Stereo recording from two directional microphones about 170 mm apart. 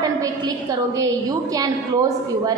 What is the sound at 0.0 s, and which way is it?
A woman's voice, 20° right (ahead or behind).